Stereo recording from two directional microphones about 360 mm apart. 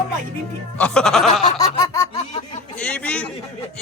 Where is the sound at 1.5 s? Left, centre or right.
Centre.